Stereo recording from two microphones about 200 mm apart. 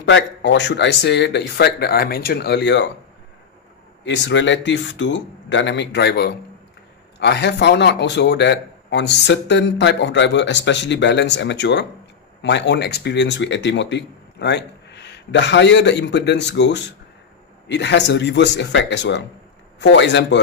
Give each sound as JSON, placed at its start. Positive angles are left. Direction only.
{"t": 0.0, "sound": "a man's voice", "side_deg": 65}
{"t": 4.0, "sound": "a man's voice", "side_deg": 60}